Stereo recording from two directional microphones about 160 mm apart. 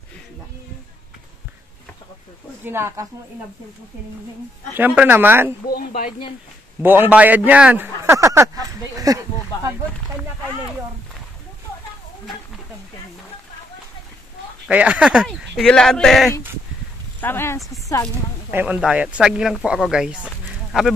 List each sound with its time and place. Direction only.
2.6 s speech: 15° right (ahead or behind)
4.7 s speech: 10° right (ahead or behind)
5.7 s speech: 70° left (ahead or behind)
6.8 s a sound: 10° right (ahead or behind)
14.7 s speech: 10° right (ahead or behind)
17.2 s speech: 15° left (ahead or behind)
18.5 s speech: 15° right (ahead or behind)